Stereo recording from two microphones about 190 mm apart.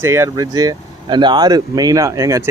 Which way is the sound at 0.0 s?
15° right (ahead or behind).